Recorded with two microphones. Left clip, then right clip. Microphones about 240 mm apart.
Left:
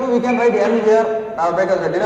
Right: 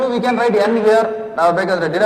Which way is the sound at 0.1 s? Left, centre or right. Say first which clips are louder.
Even; right.